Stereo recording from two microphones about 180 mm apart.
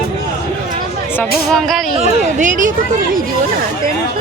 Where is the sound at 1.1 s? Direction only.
5° left (ahead or behind).